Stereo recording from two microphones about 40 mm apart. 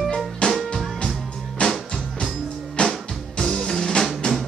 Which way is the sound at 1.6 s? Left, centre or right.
Left.